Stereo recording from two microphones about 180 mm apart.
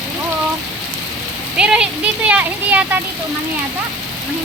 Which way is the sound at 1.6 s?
5° right (ahead or behind).